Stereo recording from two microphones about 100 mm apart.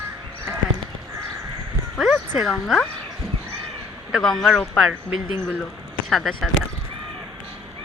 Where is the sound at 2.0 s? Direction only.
Centre (ahead or behind).